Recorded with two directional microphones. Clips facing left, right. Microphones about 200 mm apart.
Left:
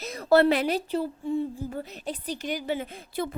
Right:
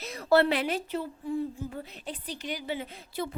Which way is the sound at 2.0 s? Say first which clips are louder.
Left 5 dB; 45° left (ahead or behind).